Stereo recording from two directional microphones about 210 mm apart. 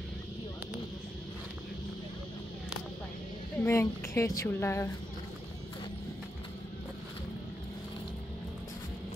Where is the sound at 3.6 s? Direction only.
10° left (ahead or behind).